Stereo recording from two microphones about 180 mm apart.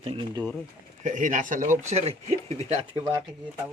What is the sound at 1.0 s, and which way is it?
A man's voice, 45° right (ahead or behind).